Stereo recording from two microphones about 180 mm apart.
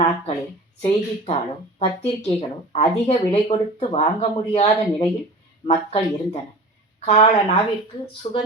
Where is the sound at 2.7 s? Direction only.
40° left (ahead or behind).